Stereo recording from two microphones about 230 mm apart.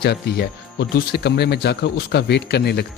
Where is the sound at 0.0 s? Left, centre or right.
Left.